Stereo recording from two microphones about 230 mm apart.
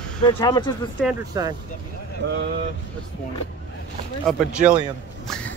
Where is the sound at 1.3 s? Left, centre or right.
Centre.